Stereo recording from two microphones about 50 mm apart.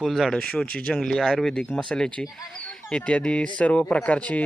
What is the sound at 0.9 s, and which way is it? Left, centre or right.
Speech, centre.